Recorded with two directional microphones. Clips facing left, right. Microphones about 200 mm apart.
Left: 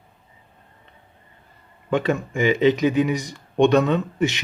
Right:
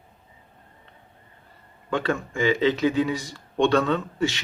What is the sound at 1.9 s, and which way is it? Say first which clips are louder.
Speech: left 4 dB; 20° left (ahead or behind).